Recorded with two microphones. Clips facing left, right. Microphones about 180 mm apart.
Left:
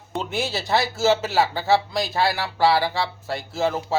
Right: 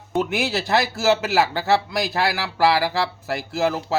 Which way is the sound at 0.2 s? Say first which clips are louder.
Right 4 dB; 70° right (ahead or behind).